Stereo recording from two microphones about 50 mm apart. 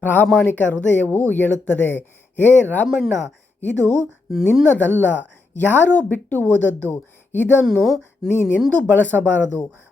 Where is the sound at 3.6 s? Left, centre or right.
Left.